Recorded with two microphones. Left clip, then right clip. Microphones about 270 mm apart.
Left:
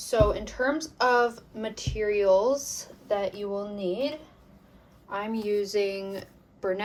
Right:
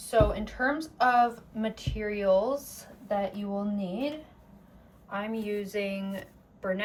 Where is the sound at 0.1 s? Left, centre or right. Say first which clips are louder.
Left 1 dB; left.